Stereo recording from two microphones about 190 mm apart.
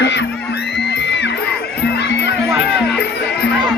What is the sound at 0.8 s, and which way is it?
Music, 60° left (ahead or behind).